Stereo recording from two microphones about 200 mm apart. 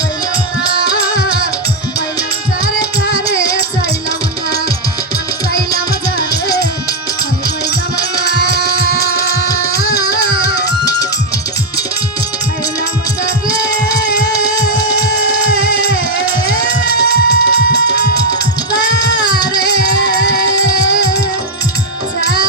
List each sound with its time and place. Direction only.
8.4 s music: 55° left (ahead or behind)
16.9 s music: 55° left (ahead or behind)
18.8 s a sound: 60° left (ahead or behind)